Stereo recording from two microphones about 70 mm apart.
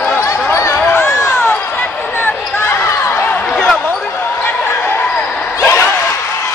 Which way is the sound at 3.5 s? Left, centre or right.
Centre.